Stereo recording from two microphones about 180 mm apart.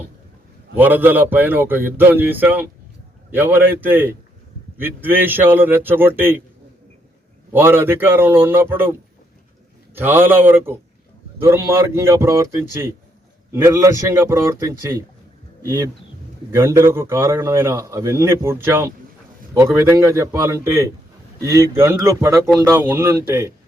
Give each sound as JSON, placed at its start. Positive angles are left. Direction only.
{"t": 0.8, "sound": "a man's voice", "side_deg": -10}
{"t": 7.5, "sound": "a man's voice", "side_deg": -10}